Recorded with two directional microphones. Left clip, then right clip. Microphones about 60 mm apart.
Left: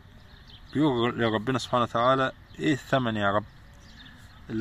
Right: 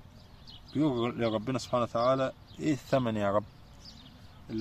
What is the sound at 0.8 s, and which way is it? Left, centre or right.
Speech, left.